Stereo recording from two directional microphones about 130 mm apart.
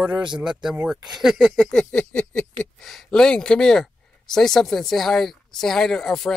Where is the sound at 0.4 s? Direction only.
5° right (ahead or behind).